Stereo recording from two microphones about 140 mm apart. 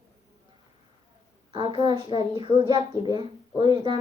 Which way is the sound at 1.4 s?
40° right (ahead or behind).